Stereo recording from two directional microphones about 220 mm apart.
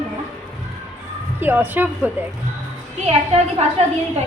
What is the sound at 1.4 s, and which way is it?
Speech, 10° right (ahead or behind).